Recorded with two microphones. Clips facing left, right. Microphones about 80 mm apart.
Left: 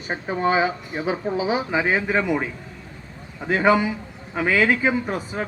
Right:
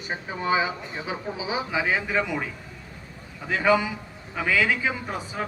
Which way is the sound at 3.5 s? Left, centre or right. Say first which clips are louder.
Left 3 dB; left.